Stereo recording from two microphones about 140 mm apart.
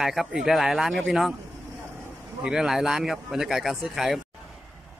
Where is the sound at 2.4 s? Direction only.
5° right (ahead or behind).